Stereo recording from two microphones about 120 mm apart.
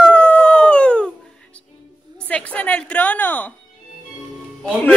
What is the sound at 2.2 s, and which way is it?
A woman's voice, 10° left (ahead or behind).